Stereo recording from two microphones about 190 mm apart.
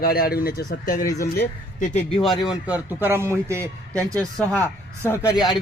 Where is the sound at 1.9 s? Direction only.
30° left (ahead or behind).